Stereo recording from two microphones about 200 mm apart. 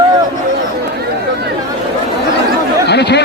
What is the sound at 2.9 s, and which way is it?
Speech, 55° left (ahead or behind).